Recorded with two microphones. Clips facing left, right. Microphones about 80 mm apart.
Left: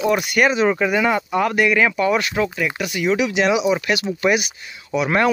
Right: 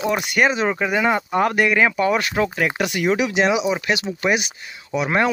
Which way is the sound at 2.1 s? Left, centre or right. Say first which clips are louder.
Even; right.